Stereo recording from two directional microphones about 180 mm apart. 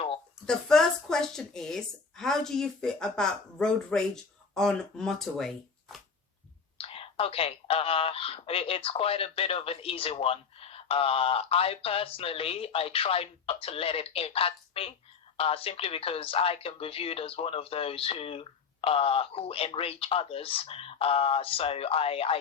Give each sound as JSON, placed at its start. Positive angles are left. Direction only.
{"t": 0.4, "sound": "speech", "side_deg": 5}
{"t": 6.7, "sound": "speech", "side_deg": 30}